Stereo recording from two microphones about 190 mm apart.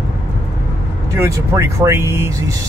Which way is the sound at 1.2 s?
15° right (ahead or behind).